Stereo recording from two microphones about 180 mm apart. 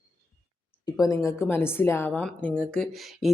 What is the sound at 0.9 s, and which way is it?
A woman's voice, 20° left (ahead or behind).